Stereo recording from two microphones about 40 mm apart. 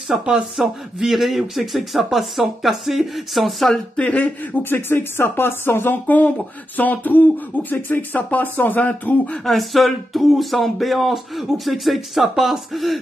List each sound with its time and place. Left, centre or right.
0.6 s speech: centre
3.9 s speech: left
4.6 s speech: left
6.0 s speech: left
9.4 s speech: centre